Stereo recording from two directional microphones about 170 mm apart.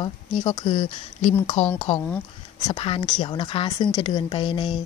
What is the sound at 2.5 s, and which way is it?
Speech, 25° left (ahead or behind).